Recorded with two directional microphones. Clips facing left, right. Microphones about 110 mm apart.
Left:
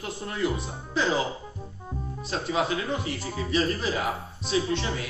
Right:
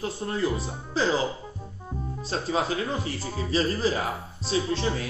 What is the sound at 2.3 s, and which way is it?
A man's voice, 35° right (ahead or behind).